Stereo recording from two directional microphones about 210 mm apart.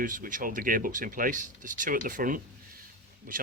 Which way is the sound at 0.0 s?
40° right (ahead or behind).